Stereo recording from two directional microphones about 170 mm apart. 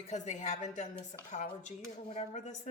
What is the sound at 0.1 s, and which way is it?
Speech, 45° left (ahead or behind).